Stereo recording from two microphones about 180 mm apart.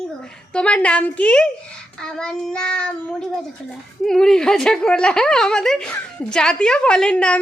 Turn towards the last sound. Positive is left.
turn(degrees=5)  # may be behind; listen again after turning